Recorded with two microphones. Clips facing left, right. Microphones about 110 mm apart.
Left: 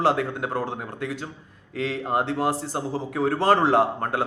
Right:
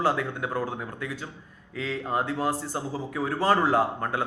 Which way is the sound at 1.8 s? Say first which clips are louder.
Left 3 dB; 70° left (ahead or behind).